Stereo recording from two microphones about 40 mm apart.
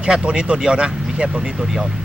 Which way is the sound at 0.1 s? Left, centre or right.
Right.